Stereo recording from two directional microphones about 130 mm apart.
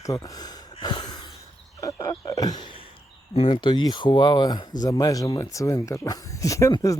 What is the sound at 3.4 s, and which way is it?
Speech, 40° left (ahead or behind).